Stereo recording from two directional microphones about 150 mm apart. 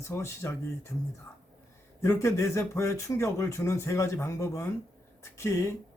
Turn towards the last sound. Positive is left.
turn(degrees=20)  # may be behind; listen again after turning